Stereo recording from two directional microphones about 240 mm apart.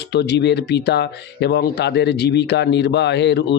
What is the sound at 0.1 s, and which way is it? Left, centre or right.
Speech, left.